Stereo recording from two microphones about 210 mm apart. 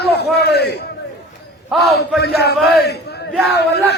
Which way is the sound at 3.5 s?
50° left (ahead or behind).